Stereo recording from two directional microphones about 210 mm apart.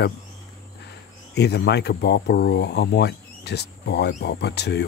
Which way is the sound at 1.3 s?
50° left (ahead or behind).